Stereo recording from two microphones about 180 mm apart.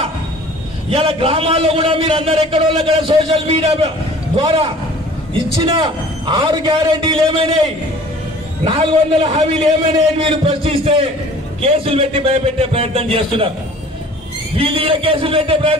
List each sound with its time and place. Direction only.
0.8 s a man's voice: 35° right (ahead or behind)
8.6 s a man's voice: 30° right (ahead or behind)
14.6 s a man's voice: 30° right (ahead or behind)